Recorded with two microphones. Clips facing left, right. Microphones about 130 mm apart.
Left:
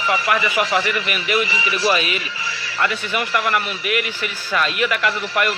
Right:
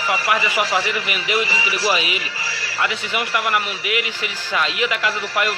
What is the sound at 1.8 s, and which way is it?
A man's voice, 20° right (ahead or behind).